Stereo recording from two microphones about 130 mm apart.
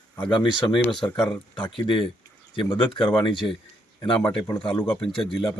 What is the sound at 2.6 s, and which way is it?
Speech, 40° left (ahead or behind).